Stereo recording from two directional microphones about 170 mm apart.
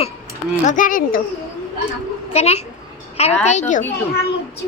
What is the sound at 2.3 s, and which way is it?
A child's voice, 40° left (ahead or behind).